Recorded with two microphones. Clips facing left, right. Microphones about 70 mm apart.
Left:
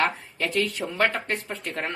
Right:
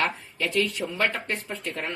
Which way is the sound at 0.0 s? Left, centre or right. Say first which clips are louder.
Left 2 dB; left.